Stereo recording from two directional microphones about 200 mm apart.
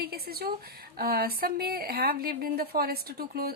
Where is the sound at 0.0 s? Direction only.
50° right (ahead or behind).